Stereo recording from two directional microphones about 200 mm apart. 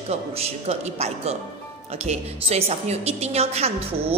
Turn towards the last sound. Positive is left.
turn(degrees=-30)  # may be behind; listen again after turning